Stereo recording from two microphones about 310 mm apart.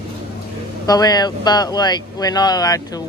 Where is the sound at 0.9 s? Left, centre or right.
Centre.